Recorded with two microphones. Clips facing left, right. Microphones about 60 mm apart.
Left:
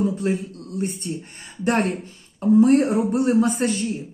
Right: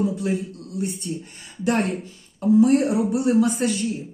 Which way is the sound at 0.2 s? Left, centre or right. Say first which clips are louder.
Left 1 dB; left.